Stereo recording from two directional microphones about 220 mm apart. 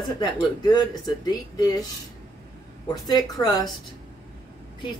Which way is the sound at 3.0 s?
15° left (ahead or behind).